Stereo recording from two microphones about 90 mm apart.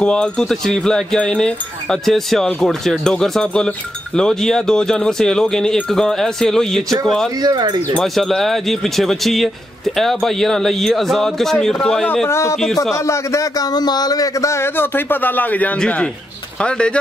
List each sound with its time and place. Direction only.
0.0 s speech: 10° left (ahead or behind)
7.4 s speech: 55° right (ahead or behind)
8.0 s speech: centre (ahead or behind)
12.3 s speech: 35° left (ahead or behind); by 17.0 s 10° left (ahead or behind)